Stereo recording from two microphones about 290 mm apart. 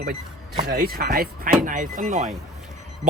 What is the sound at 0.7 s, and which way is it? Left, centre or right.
Speech, right.